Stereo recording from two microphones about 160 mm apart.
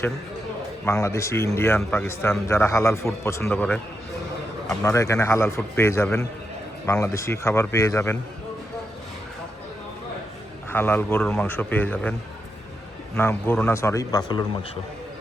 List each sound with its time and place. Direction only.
0.9 s a man's voice: 20° left (ahead or behind)
4.8 s a man's voice: 20° left (ahead or behind)
10.7 s a man's voice: 10° left (ahead or behind)
13.1 s a man's voice: 15° left (ahead or behind)